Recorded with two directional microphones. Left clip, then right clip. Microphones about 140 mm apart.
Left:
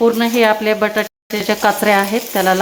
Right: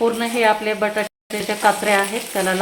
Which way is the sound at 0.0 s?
45° left (ahead or behind).